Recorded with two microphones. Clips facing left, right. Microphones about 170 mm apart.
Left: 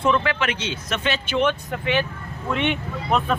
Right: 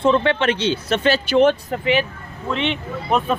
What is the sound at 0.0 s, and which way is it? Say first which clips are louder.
Speech: right 5 dB; 30° right (ahead or behind).